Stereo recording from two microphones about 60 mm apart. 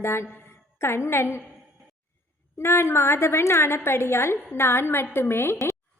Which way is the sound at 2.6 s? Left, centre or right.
Left.